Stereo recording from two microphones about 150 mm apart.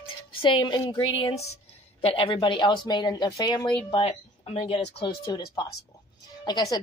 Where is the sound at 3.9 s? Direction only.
40° left (ahead or behind).